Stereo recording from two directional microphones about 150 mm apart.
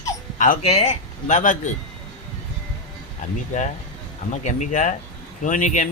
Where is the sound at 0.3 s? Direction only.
60° left (ahead or behind).